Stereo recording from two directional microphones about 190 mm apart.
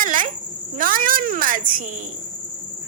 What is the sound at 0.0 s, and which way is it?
Cricket, 45° right (ahead or behind).